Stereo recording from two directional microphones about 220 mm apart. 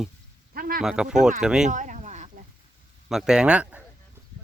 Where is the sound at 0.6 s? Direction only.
40° right (ahead or behind).